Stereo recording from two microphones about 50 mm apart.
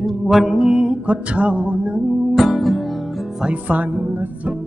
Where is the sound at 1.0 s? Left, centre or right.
Right.